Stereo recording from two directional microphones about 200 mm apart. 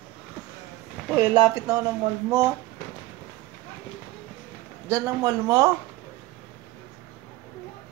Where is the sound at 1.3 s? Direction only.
20° right (ahead or behind).